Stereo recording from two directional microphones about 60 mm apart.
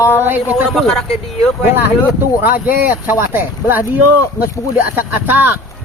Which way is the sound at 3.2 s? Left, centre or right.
Right.